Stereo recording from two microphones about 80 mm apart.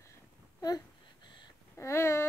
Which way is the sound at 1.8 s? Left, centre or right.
Left.